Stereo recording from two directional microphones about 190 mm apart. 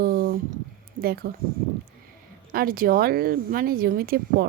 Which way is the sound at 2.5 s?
50° right (ahead or behind).